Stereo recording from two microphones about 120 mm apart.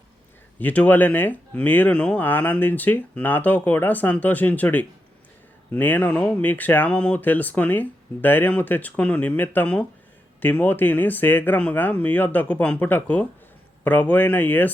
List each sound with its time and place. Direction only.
0.6 s speech: 15° left (ahead or behind)